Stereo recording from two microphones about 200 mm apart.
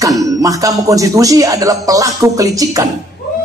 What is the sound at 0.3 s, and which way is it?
A man's voice, 15° right (ahead or behind).